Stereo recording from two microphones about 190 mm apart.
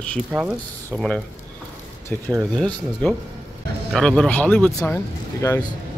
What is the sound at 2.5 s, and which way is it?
Speech, 5° left (ahead or behind).